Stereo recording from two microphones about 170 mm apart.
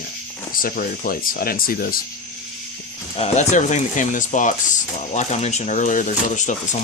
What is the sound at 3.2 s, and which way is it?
Speech, 45° left (ahead or behind).